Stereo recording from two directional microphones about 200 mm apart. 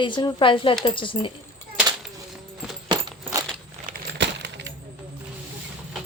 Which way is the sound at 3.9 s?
55° right (ahead or behind).